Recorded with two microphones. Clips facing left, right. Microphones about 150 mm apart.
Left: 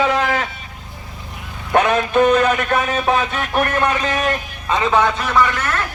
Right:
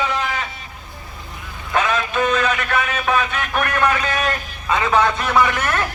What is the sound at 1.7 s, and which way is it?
Speech, 60° left (ahead or behind).